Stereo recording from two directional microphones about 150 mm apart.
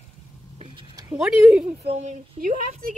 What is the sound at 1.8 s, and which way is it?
Speech, 45° right (ahead or behind).